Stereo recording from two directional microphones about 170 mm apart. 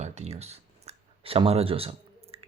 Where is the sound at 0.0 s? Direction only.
40° right (ahead or behind).